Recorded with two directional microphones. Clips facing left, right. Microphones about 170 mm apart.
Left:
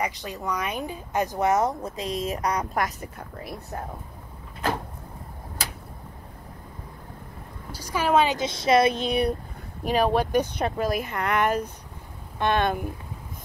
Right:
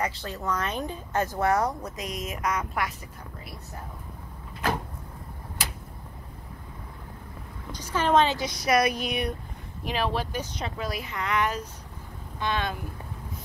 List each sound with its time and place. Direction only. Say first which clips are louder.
0.0 s speech: left 1 dB; 15° left (ahead or behind); by 3.1 s 45° left (ahead or behind)
7.7 s a woman's voice: left 1 dB; 10° left (ahead or behind)
8.4 s speech: left 4 dB; 25° left (ahead or behind)
9.8 s speech: left 6 dB; 45° left (ahead or behind)